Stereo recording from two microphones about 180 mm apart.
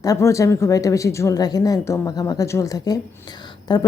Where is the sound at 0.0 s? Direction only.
15° left (ahead or behind).